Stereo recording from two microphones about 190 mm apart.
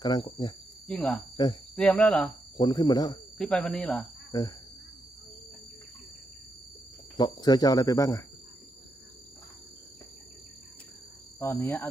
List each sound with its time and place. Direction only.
0.0 s speech: 20° left (ahead or behind)
0.9 s speech: 5° left (ahead or behind)
2.6 s speech: 20° left (ahead or behind)
3.3 s speech: 5° left (ahead or behind)
4.3 s speech: 20° left (ahead or behind)
7.2 s speech: 20° left (ahead or behind)
11.3 s speech: 10° left (ahead or behind)